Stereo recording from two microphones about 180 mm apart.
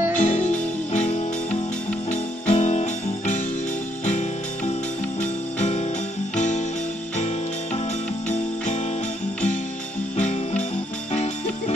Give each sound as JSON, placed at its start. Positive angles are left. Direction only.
{"t": 0.2, "sound": "music", "side_deg": 40}
{"t": 5.2, "sound": "music", "side_deg": 40}
{"t": 10.1, "sound": "music", "side_deg": 40}